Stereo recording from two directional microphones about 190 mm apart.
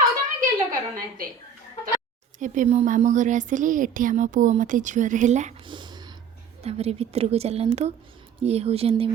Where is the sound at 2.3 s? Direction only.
40° right (ahead or behind).